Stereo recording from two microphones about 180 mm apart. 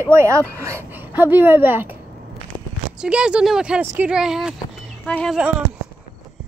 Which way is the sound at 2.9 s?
5° right (ahead or behind).